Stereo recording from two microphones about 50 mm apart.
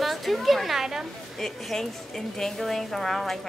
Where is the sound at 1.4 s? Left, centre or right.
Centre.